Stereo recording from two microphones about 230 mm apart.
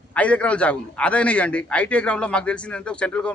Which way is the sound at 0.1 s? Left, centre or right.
Centre.